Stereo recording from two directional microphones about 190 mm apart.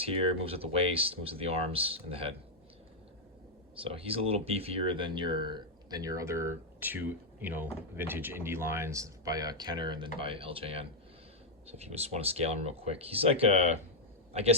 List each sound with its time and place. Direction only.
0.0 s speech: 30° right (ahead or behind)
3.8 s speech: 30° right (ahead or behind)